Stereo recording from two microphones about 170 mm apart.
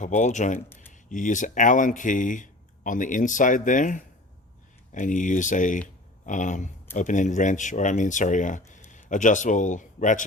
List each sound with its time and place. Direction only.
0.0 s speech: 45° left (ahead or behind)